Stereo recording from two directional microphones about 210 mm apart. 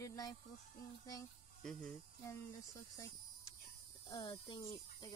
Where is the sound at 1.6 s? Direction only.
5° left (ahead or behind).